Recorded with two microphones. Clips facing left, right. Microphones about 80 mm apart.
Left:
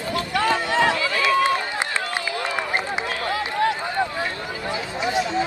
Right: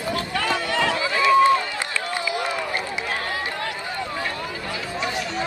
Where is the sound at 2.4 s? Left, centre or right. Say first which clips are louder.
Left 1 dB; left.